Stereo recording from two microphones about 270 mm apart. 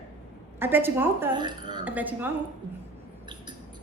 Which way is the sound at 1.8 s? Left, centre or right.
Centre.